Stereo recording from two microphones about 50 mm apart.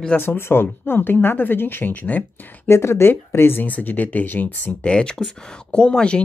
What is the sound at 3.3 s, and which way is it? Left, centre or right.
Speech, left.